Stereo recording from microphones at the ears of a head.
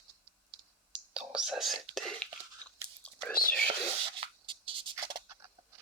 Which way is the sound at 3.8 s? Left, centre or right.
Right.